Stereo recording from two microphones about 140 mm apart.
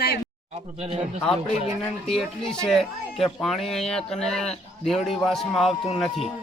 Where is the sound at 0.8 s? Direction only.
45° right (ahead or behind).